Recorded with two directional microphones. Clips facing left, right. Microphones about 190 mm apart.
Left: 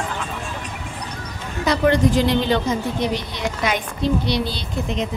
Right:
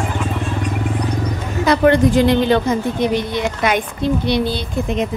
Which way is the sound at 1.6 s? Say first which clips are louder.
Right 4 dB; 55° right (ahead or behind).